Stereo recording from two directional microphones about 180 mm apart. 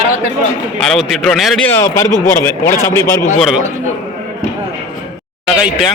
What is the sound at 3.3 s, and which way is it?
Speech, centre (ahead or behind).